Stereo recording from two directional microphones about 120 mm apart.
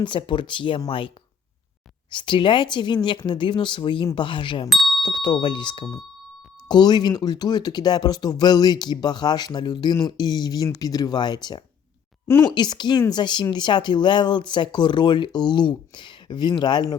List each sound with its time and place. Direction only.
0.0 s a woman's voice: 40° left (ahead or behind)
4.7 s doorbell: centre (ahead or behind)
5.0 s speech: 40° left (ahead or behind)